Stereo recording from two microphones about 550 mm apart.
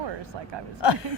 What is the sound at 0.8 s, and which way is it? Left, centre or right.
Speech, left.